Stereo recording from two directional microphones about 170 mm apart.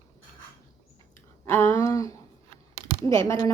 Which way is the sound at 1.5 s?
15° left (ahead or behind).